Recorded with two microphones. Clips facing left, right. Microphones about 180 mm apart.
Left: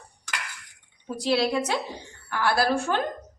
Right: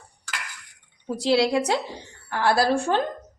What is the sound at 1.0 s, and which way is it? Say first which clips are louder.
A woman's voice: right 3 dB; 25° right (ahead or behind).